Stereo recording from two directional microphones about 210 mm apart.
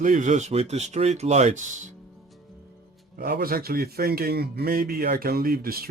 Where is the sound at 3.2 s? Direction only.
45° right (ahead or behind).